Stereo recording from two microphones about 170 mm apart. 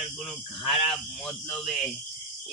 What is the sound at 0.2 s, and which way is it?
Speech, centre (ahead or behind).